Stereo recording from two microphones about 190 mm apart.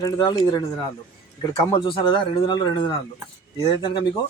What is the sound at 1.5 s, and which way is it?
Speech, 25° left (ahead or behind).